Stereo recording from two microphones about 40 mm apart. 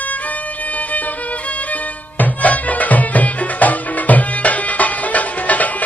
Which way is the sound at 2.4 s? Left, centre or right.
Left.